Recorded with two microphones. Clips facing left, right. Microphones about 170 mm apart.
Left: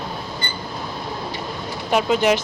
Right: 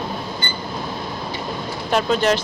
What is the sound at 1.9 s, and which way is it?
Speech, 10° left (ahead or behind).